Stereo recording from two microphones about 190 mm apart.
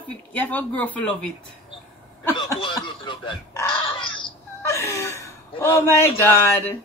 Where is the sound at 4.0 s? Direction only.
25° left (ahead or behind).